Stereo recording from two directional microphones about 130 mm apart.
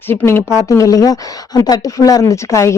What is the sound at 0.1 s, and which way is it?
Speech, 15° left (ahead or behind).